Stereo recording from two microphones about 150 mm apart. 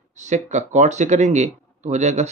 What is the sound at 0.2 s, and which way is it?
Speech, 50° right (ahead or behind).